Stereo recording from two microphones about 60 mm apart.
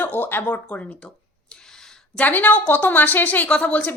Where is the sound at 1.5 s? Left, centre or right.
Centre.